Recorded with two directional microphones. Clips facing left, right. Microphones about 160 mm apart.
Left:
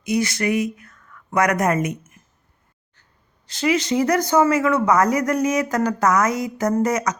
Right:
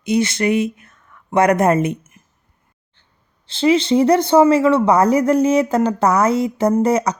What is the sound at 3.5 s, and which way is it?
Speech, 30° right (ahead or behind).